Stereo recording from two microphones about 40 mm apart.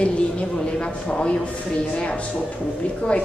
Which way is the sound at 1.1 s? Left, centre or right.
Left.